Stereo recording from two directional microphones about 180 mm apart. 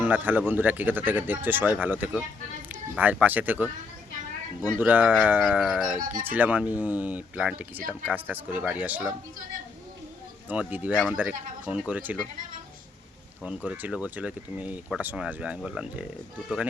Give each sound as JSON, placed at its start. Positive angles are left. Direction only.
{"t": 0.0, "sound": "speech", "side_deg": -10}
{"t": 4.8, "sound": "speech", "side_deg": -10}
{"t": 6.0, "sound": "speech", "side_deg": -50}
{"t": 6.2, "sound": "speech", "side_deg": -10}
{"t": 10.5, "sound": "speech", "side_deg": -10}
{"t": 13.4, "sound": "speech", "side_deg": -5}